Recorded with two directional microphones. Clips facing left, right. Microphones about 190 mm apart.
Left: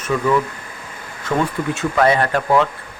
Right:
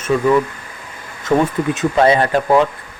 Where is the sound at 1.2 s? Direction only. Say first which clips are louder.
Right 5 dB; 20° right (ahead or behind).